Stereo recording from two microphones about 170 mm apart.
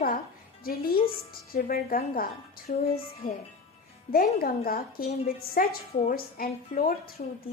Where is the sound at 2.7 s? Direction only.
50° left (ahead or behind).